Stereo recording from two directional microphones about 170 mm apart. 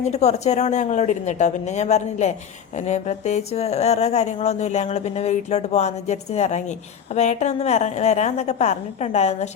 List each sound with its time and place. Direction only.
0.0 s a woman's voice: 40° left (ahead or behind)